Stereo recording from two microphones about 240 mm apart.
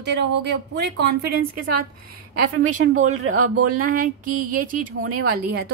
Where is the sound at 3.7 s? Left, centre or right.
Right.